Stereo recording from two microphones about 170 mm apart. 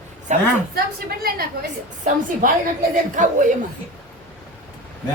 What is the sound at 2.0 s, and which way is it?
A woman's voice, 50° right (ahead or behind).